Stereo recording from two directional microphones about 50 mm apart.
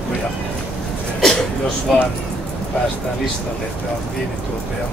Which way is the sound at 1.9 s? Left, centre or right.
Centre.